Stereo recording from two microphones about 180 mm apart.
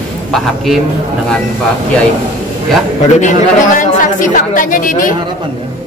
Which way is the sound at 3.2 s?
45° left (ahead or behind).